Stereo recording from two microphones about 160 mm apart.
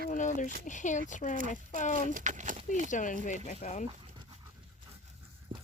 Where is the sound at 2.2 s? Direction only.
55° right (ahead or behind).